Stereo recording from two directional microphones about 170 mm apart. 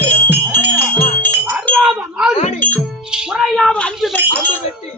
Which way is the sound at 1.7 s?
5° right (ahead or behind).